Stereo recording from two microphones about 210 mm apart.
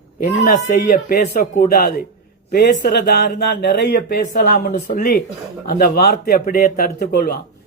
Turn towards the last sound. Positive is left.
turn(degrees=45)  # may be behind; listen again after turning